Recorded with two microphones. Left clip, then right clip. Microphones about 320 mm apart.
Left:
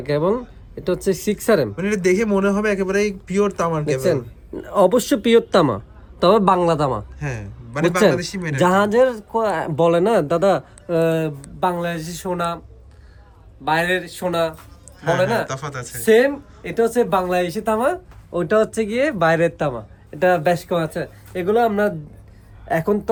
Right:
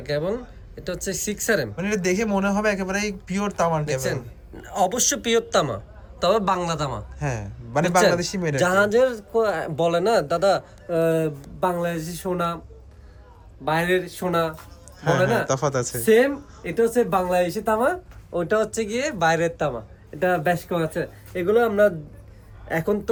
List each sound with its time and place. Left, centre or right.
0.0 s speech: centre
1.7 s speech: centre
4.7 s speech: centre
7.2 s a man's voice: centre
8.7 s speech: centre
13.7 s speech: centre
15.4 s a man's voice: centre
16.0 s speech: centre